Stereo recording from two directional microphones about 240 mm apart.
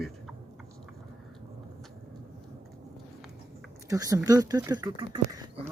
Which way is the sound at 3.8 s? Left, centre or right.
Centre.